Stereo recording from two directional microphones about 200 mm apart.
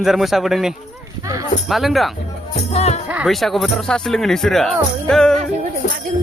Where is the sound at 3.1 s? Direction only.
5° right (ahead or behind).